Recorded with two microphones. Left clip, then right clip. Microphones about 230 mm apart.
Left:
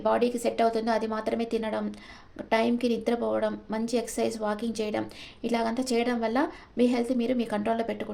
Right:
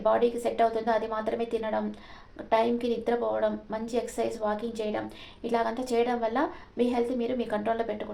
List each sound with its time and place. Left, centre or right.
0.0 s a woman's voice: left